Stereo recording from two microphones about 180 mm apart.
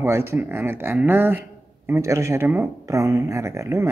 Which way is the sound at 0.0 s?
15° right (ahead or behind).